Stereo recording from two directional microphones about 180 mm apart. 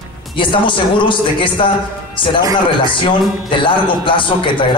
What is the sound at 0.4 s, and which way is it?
A man's voice, 30° left (ahead or behind).